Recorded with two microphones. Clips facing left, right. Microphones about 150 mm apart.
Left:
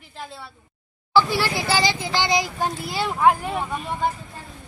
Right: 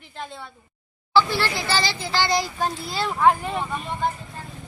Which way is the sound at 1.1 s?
15° left (ahead or behind).